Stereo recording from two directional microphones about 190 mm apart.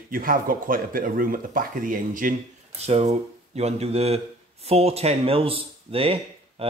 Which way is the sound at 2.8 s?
35° right (ahead or behind).